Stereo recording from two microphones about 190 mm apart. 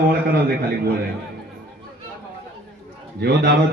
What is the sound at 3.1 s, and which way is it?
Speech, 60° right (ahead or behind).